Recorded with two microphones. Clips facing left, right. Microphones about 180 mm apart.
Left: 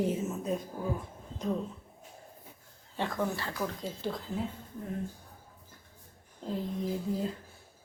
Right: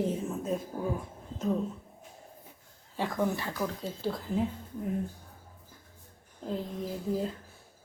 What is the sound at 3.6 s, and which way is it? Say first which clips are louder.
Speech: right 1 dB; centre (ahead or behind).